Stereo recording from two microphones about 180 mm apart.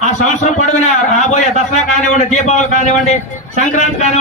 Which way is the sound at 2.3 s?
40° left (ahead or behind).